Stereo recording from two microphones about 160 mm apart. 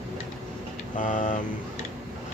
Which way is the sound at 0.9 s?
55° left (ahead or behind).